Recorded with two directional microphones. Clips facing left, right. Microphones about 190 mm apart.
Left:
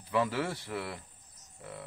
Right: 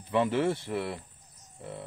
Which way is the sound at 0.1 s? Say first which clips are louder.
Right 5 dB; 25° right (ahead or behind).